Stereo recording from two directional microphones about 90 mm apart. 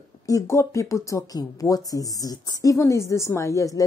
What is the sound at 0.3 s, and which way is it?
Speech, 35° left (ahead or behind).